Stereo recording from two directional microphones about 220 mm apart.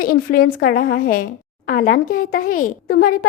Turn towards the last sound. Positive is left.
turn(degrees=40)  # may be behind; listen again after turning